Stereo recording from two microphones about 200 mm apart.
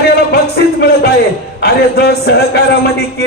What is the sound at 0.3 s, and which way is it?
Music, 55° left (ahead or behind).